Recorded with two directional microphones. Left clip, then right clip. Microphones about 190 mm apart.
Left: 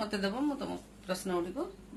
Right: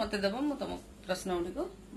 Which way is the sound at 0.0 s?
65° left (ahead or behind).